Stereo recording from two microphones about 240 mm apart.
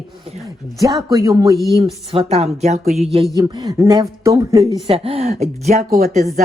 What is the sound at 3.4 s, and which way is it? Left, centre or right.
Speech, centre.